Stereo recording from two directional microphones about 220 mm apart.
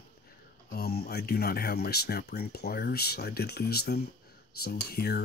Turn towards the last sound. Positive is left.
turn(degrees=45)  # may be behind; listen again after turning